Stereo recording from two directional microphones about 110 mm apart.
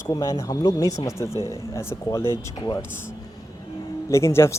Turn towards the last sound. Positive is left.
turn(degrees=25)  # may be behind; listen again after turning